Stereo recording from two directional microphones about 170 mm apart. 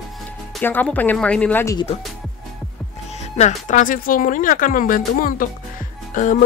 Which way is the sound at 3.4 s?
45° left (ahead or behind).